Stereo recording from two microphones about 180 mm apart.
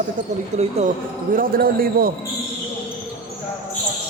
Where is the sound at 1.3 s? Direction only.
55° right (ahead or behind).